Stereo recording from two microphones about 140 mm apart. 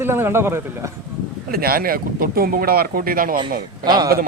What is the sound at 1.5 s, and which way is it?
Speech, 90° right.